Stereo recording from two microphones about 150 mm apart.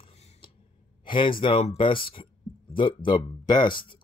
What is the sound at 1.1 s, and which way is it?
Speech, 35° left (ahead or behind).